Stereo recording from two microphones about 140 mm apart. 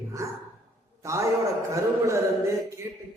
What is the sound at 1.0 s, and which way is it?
A man's voice, 20° right (ahead or behind).